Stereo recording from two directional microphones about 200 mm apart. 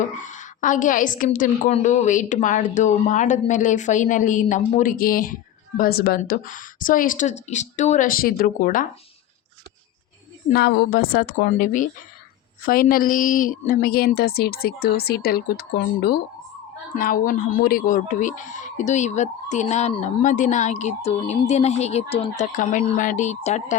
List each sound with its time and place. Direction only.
0.2 s a woman's voice: 40° left (ahead or behind)
10.5 s a woman's voice: 50° left (ahead or behind)